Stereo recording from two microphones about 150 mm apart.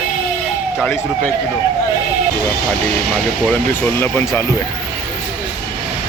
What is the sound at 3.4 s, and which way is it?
Speech, 10° left (ahead or behind).